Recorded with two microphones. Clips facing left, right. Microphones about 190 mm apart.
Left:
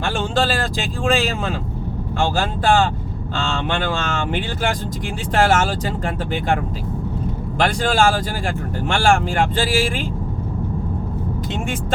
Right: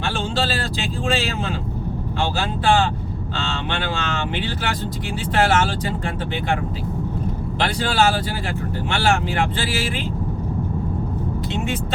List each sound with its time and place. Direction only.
0.0 s speech: 50° left (ahead or behind)
7.6 s speech: 45° left (ahead or behind)